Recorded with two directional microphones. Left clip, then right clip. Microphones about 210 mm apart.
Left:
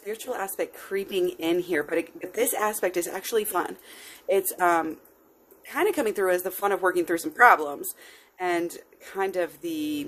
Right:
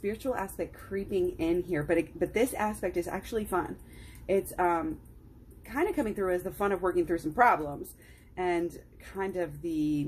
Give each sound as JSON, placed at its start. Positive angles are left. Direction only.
{"t": 0.6, "sound": "speech", "side_deg": 35}